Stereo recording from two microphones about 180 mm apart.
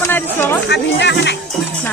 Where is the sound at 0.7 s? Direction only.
75° left (ahead or behind).